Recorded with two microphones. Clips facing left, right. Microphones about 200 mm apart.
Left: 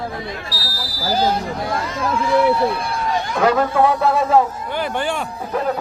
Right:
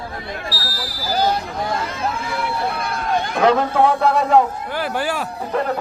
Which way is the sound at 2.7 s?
55° right (ahead or behind).